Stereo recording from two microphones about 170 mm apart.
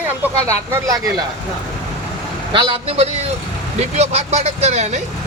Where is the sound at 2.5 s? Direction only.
30° right (ahead or behind).